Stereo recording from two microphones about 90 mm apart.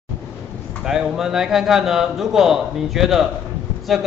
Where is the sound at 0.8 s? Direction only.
5° right (ahead or behind).